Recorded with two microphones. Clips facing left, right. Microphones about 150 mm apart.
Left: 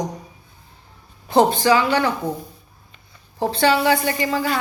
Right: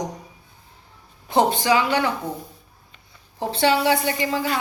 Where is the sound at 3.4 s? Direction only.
20° right (ahead or behind).